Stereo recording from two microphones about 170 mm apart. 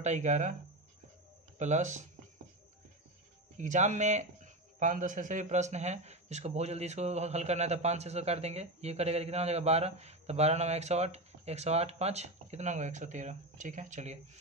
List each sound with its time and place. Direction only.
0.0 s speech: 45° right (ahead or behind)
1.6 s speech: 45° right (ahead or behind)
3.5 s speech: 45° right (ahead or behind)